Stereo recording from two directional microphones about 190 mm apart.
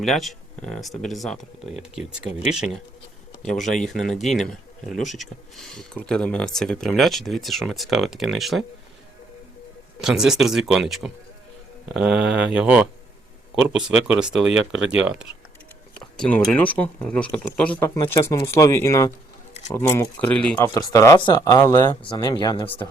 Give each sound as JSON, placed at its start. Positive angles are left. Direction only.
{"t": 0.0, "sound": "speech", "side_deg": 0}
{"t": 3.8, "sound": "speech", "side_deg": 0}
{"t": 10.0, "sound": "speech", "side_deg": 0}